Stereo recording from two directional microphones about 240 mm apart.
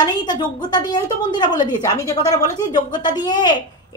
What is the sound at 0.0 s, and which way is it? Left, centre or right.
A woman's voice, centre.